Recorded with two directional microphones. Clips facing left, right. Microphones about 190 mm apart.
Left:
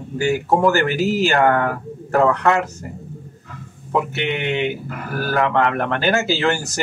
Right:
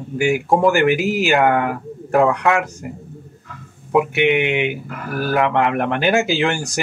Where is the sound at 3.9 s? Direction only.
15° right (ahead or behind).